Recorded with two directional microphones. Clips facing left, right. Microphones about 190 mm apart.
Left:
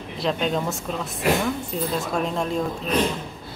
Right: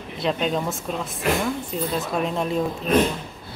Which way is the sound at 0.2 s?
Centre (ahead or behind).